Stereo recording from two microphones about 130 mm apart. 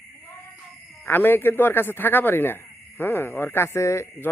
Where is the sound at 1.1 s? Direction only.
15° left (ahead or behind).